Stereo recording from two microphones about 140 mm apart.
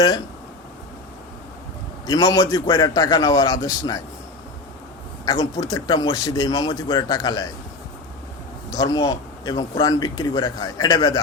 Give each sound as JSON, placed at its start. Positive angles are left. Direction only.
{"t": 2.0, "sound": "a man's voice", "side_deg": 25}
{"t": 5.2, "sound": "a man's voice", "side_deg": 30}
{"t": 8.7, "sound": "a man's voice", "side_deg": 25}